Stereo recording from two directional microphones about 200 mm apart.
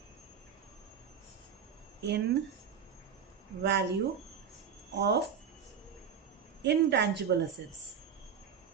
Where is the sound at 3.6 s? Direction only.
55° right (ahead or behind).